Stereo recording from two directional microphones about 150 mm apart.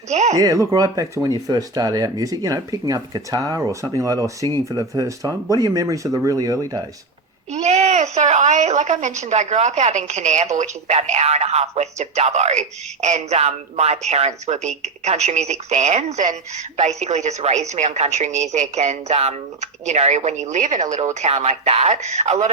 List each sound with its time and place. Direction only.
0.1 s speech: 50° right (ahead or behind)
0.3 s speech: 20° right (ahead or behind)
7.5 s speech: 50° right (ahead or behind)